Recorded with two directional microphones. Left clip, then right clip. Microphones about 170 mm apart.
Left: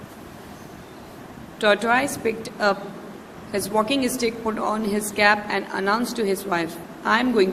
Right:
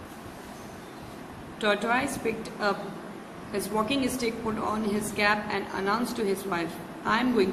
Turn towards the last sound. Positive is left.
turn(degrees=45)  # may be behind; listen again after turning